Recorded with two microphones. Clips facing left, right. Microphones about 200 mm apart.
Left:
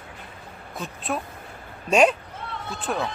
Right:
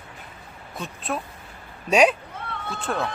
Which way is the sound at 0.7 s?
Centre (ahead or behind).